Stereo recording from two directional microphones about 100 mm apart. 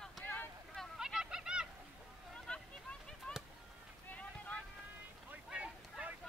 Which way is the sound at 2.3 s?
10° left (ahead or behind).